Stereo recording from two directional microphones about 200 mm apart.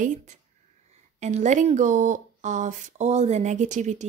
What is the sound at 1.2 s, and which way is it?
A woman's voice, 35° right (ahead or behind).